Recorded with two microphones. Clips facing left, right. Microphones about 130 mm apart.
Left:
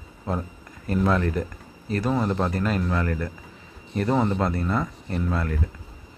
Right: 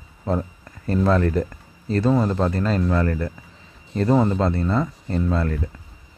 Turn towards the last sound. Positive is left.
turn(degrees=-30)  # may be behind; listen again after turning